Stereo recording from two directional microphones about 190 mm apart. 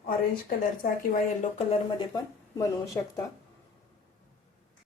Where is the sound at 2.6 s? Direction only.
15° left (ahead or behind).